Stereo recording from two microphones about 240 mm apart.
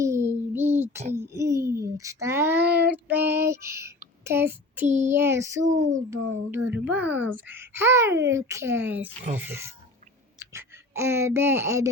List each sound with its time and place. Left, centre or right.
0.0 s child singing: centre
1.3 s a child's voice: centre
2.9 s music: centre
4.2 s speech: centre
7.0 s speech: right
7.4 s speech: centre